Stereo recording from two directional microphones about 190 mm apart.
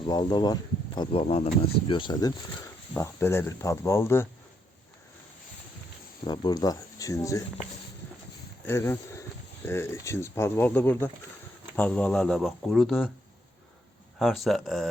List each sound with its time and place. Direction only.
0.1 s speech: 20° left (ahead or behind)
6.2 s speech: 20° left (ahead or behind)
8.6 s speech: 15° left (ahead or behind)
14.2 s speech: centre (ahead or behind)